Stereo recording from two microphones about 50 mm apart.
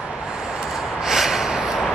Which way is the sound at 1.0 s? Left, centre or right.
Centre.